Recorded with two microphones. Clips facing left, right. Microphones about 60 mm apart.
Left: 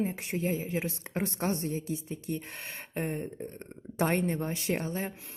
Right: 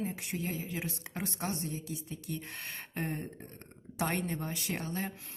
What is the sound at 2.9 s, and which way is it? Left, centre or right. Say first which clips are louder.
Speech: left 4 dB; centre.